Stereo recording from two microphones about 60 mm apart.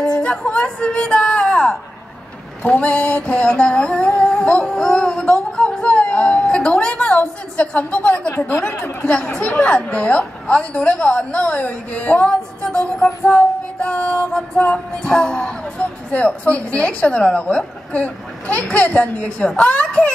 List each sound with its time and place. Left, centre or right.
0.2 s speech: centre
2.6 s music: left
9.2 s music: centre
9.5 s a woman's voice: left
13.3 s music: left
16.1 s a woman's voice: left